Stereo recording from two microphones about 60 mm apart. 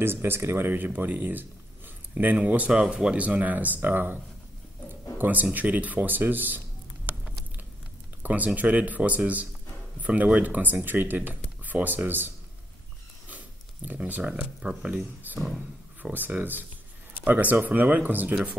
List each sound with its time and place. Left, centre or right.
0.0 s speech: right
8.2 s a sound: right
8.5 s speech: right
13.9 s speech: right
15.3 s speech: right